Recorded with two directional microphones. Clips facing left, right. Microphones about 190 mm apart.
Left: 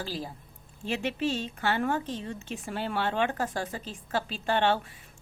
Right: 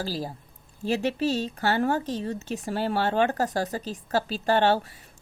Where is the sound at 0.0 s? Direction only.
40° right (ahead or behind).